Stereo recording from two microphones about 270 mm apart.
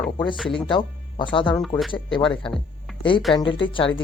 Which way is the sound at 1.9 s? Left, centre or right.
Centre.